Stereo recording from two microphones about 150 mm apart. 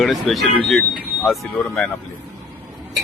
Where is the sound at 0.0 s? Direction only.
Centre (ahead or behind).